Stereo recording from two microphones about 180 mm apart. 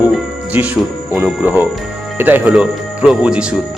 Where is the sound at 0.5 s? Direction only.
10° right (ahead or behind).